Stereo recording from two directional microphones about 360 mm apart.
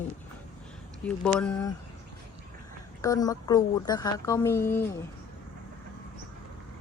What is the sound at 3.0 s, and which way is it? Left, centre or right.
A woman's voice, centre.